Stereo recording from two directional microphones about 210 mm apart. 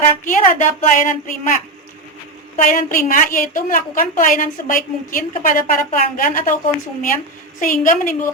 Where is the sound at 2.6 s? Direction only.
40° left (ahead or behind).